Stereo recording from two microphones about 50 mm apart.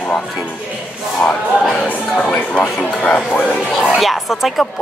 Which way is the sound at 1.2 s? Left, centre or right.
Left.